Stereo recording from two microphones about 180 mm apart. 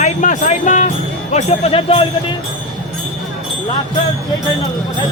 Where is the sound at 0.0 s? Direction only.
40° left (ahead or behind).